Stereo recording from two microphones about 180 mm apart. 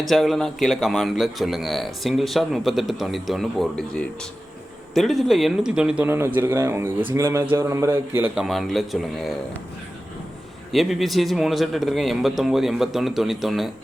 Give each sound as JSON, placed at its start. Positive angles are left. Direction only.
{"t": 0.1, "sound": "a man's voice", "side_deg": 0}
{"t": 8.4, "sound": "a man's voice", "side_deg": 0}
{"t": 10.7, "sound": "a man's voice", "side_deg": 0}